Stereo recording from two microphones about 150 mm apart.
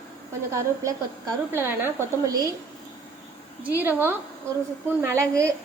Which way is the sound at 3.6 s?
15° right (ahead or behind).